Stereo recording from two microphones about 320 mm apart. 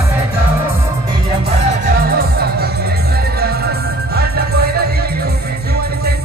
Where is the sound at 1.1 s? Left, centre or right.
Centre.